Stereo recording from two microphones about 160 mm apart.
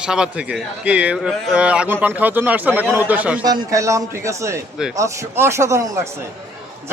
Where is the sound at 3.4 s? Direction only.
20° right (ahead or behind).